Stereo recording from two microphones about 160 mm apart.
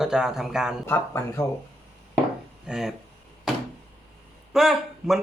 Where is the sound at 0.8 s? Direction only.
15° left (ahead or behind).